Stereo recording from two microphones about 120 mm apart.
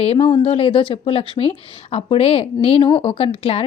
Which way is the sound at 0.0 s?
50° left (ahead or behind).